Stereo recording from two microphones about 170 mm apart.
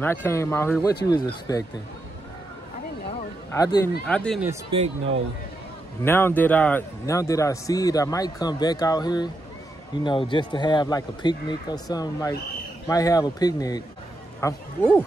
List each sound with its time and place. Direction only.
0.0 s a man's voice: 15° left (ahead or behind)
3.5 s a man's voice: 20° left (ahead or behind)
4.0 s speech: 5° left (ahead or behind)
4.6 s speech: 35° right (ahead or behind)
6.0 s a man's voice: 15° left (ahead or behind)
14.4 s speech: 10° left (ahead or behind)